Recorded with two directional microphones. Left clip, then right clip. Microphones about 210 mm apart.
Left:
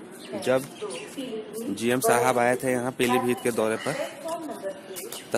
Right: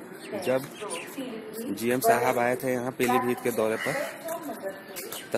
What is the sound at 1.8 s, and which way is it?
Speech, 10° left (ahead or behind).